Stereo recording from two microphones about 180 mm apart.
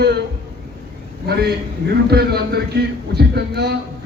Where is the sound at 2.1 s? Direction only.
60° right (ahead or behind).